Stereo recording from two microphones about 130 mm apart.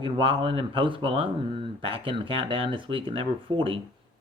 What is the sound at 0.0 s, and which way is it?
Speech, 45° right (ahead or behind).